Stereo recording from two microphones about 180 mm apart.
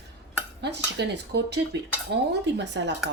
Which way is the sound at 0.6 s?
70° right (ahead or behind).